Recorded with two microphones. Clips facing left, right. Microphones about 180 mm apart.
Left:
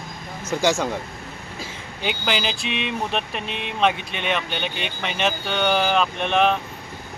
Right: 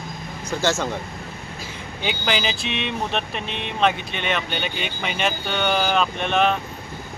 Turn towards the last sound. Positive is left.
turn(degrees=0)  # may be behind; listen again after turning